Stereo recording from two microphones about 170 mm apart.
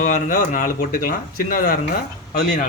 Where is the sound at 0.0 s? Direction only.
50° left (ahead or behind).